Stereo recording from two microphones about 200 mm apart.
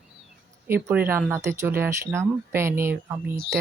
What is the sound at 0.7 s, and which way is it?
Speech, 10° right (ahead or behind).